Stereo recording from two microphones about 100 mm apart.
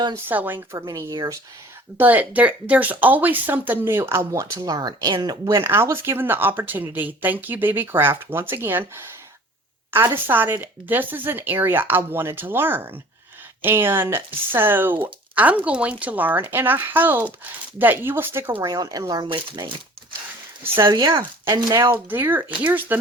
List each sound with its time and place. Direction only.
0.3 s speech: 20° right (ahead or behind)
0.8 s speech: 40° right (ahead or behind)
2.0 s speech: 15° right (ahead or behind)
9.9 s speech: 20° right (ahead or behind)
18.7 s speech: 40° right (ahead or behind)
19.2 s speech: 60° right (ahead or behind)
20.8 s speech: 55° right (ahead or behind)
21.5 s speech: 35° right (ahead or behind)
21.9 s speech: 20° right (ahead or behind)